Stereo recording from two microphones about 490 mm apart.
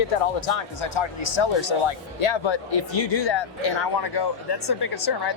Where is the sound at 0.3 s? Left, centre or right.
Left.